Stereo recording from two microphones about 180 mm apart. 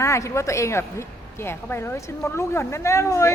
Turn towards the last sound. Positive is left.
turn(degrees=15)  # may be behind; listen again after turning